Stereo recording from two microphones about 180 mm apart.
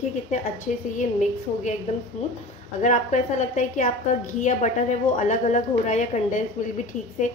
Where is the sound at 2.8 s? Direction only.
40° left (ahead or behind).